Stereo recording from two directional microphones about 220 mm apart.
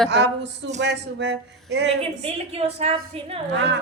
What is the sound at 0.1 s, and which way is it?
Speech, 50° right (ahead or behind).